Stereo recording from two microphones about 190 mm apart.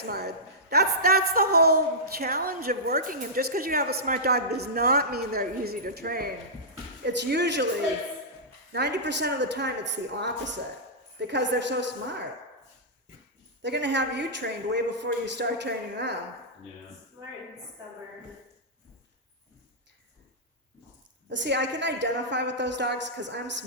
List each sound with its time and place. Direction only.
0.0 s a woman's voice: 55° right (ahead or behind)
7.0 s a man's voice: 65° right (ahead or behind)
8.7 s a man's voice: 65° right (ahead or behind)
13.6 s a man's voice: 65° right (ahead or behind)
17.2 s a sound: 20° right (ahead or behind)
21.2 s a woman's voice: 70° right (ahead or behind)